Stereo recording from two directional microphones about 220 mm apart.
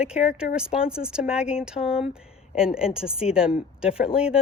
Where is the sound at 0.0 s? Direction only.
5° right (ahead or behind).